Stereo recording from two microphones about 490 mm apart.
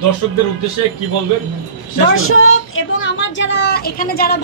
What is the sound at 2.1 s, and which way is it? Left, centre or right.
A woman's voice, left.